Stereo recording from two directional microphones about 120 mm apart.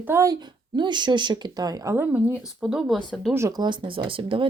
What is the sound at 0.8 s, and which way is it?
A woman's voice, 40° right (ahead or behind).